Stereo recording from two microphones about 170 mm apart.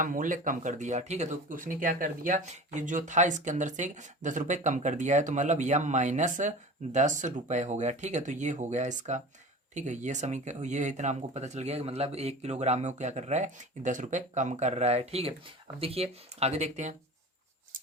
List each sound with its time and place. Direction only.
0.0 s speech: 50° right (ahead or behind)